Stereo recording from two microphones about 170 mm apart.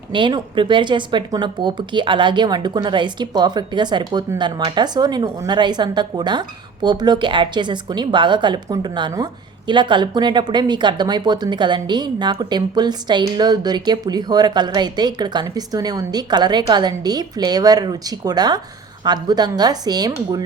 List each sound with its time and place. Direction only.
0.1 s a woman's voice: 30° right (ahead or behind)